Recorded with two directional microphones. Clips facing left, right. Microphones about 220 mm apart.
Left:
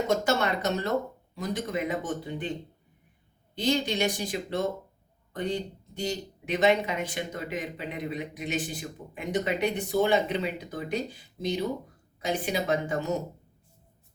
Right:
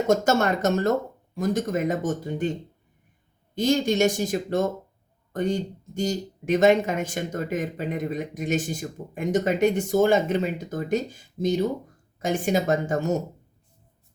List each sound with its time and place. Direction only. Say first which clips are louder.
0.1 s speech: right 7 dB; 45° right (ahead or behind)
3.5 s speech: right 5 dB; 45° right (ahead or behind)